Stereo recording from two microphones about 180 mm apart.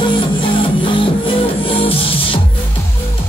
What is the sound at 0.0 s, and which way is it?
Music, 25° left (ahead or behind).